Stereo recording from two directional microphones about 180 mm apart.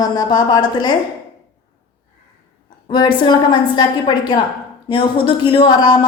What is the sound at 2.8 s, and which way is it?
Speech, 25° left (ahead or behind).